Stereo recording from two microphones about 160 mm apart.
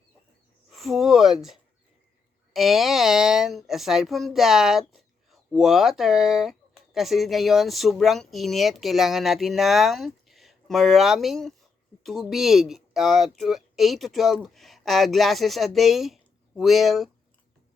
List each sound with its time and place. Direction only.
0.7 s speech: centre (ahead or behind)